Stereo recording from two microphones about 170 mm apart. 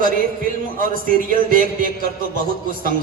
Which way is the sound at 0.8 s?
55° right (ahead or behind).